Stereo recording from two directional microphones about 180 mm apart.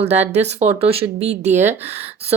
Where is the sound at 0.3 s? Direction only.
40° right (ahead or behind).